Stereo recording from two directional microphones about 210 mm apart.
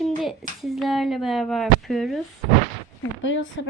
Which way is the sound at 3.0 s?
65° left (ahead or behind).